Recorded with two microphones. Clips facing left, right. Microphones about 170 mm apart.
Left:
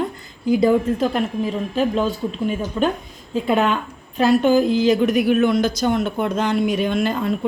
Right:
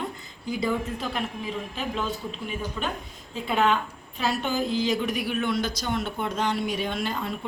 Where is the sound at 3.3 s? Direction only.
50° left (ahead or behind).